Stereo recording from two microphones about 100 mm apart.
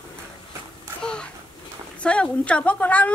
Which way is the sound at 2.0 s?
10° left (ahead or behind).